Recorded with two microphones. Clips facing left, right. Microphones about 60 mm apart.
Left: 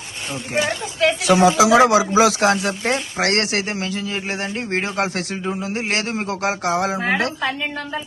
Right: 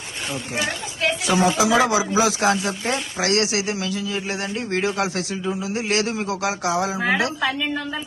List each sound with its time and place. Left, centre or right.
1.3 s a man's voice: left